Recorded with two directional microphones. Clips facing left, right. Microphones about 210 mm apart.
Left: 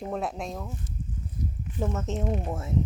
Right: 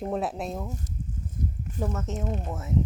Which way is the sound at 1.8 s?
25° left (ahead or behind).